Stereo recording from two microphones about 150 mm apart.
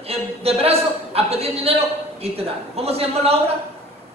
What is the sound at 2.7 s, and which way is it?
Speech, 40° right (ahead or behind).